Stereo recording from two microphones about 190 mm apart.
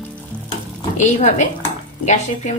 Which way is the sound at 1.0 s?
40° left (ahead or behind).